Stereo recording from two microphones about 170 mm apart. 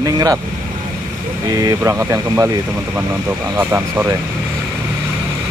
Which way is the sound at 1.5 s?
20° right (ahead or behind).